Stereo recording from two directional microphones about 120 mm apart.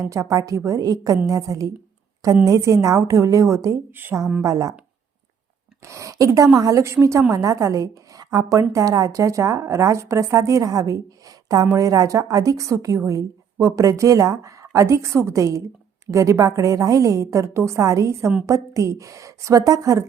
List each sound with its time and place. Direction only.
0.0 s a woman's voice: 25° right (ahead or behind)
5.8 s a woman's voice: 25° right (ahead or behind)